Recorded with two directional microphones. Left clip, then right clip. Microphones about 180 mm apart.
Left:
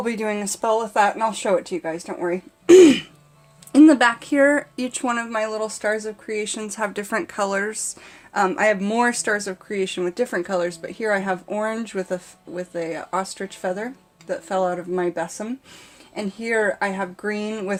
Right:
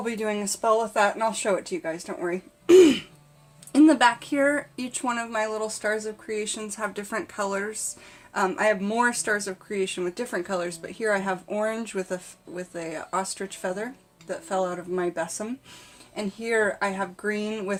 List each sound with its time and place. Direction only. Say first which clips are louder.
0.0 s speech: left 4 dB; 35° left (ahead or behind)
16.1 s speech: left 2 dB; 35° left (ahead or behind)